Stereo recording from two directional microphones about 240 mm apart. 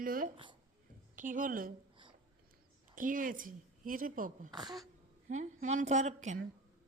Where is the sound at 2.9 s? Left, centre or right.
Right.